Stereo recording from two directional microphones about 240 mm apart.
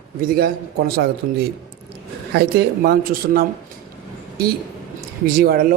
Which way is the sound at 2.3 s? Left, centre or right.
Right.